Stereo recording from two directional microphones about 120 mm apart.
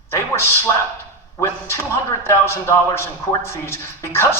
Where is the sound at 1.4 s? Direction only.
20° left (ahead or behind).